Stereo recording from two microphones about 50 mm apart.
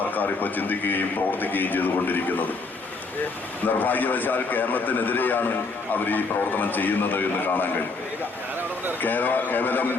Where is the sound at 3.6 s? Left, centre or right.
Left.